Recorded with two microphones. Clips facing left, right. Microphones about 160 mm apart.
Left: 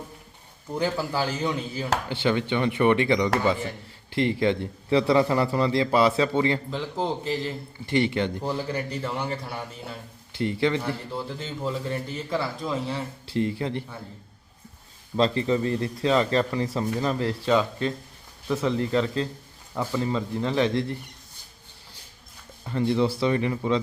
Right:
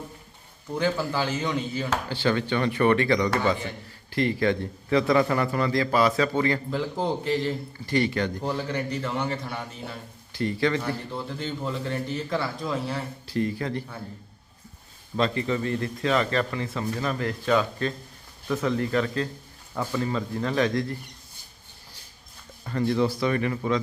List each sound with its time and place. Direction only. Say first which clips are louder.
0.7 s a man's voice: right 1 dB; 10° left (ahead or behind)
6.7 s a man's voice: right 1 dB; centre (ahead or behind)
7.9 s a man's voice: left 1 dB; 25° left (ahead or behind)
8.4 s speech: even; 10° left (ahead or behind)
10.3 s a man's voice: left 1 dB; 20° left (ahead or behind)
10.8 s a man's voice: even; 5° left (ahead or behind)
13.2 s a man's voice: left 1 dB; 25° left (ahead or behind)
15.1 s a man's voice: left 3 dB; 30° left (ahead or behind)
19.7 s speech: left 1 dB; 10° left (ahead or behind)
20.0 s a man's voice: left 1 dB; 20° left (ahead or behind)
22.6 s a man's voice: left 1 dB; 20° left (ahead or behind)